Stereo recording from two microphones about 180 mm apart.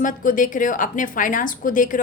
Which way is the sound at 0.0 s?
50° left (ahead or behind).